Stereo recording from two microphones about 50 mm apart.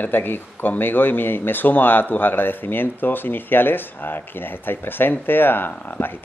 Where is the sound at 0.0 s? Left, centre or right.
Left.